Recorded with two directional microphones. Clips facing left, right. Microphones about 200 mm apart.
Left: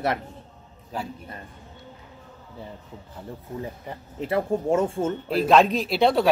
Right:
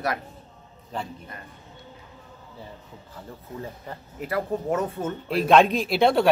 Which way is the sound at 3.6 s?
20° left (ahead or behind).